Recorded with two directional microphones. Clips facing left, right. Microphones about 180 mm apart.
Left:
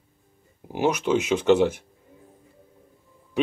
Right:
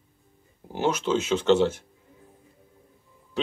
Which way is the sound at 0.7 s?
15° left (ahead or behind).